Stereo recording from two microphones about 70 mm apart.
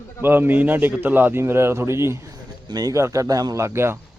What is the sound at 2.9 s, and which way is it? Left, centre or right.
A man's voice, right.